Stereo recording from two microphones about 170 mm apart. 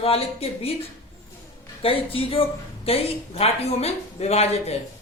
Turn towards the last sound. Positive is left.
turn(degrees=40)  # may be behind; listen again after turning